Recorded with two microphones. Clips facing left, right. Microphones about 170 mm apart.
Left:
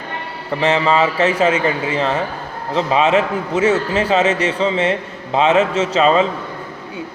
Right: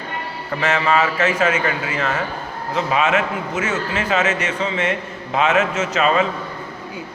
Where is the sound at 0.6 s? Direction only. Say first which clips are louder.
Left 3 dB; 30° left (ahead or behind).